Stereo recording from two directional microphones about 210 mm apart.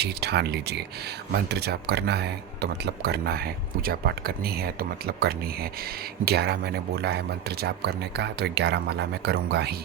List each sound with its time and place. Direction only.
0.0 s speech: 50° right (ahead or behind)